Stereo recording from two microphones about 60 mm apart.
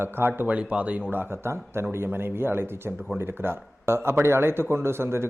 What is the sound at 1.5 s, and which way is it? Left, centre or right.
A man's voice, right.